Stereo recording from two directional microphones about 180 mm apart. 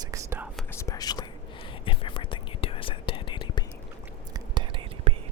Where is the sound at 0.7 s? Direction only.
15° left (ahead or behind).